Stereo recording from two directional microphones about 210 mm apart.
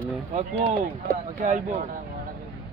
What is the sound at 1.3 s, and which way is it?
Speech, 35° right (ahead or behind).